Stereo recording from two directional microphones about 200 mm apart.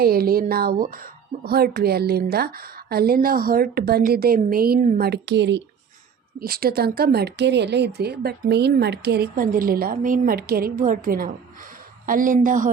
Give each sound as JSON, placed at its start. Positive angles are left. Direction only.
{"t": 0.0, "sound": "speech", "side_deg": -50}
{"t": 6.4, "sound": "speech", "side_deg": -50}